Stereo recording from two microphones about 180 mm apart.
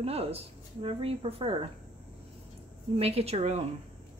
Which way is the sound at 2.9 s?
35° right (ahead or behind).